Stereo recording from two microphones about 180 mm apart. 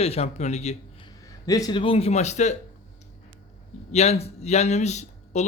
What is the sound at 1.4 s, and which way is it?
Speech, 20° left (ahead or behind).